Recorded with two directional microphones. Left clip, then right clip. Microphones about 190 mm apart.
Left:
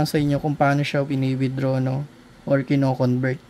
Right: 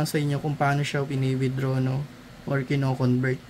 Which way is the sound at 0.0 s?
35° left (ahead or behind).